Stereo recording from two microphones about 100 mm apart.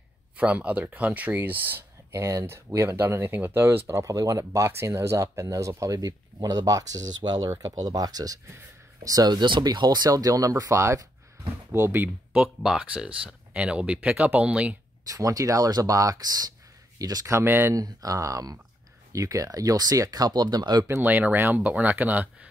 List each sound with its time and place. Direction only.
0.4 s speech: 15° right (ahead or behind)
12.4 s speech: 10° right (ahead or behind)
15.0 s speech: 35° right (ahead or behind)
17.4 s speech: 25° right (ahead or behind)
17.7 s speech: 35° right (ahead or behind)
20.8 s speech: 20° right (ahead or behind)